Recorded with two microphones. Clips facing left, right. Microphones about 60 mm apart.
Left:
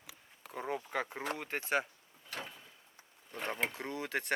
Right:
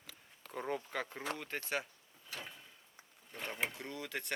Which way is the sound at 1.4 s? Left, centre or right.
Left.